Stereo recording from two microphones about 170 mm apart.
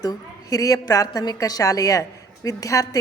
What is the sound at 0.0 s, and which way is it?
A woman's voice, 20° left (ahead or behind).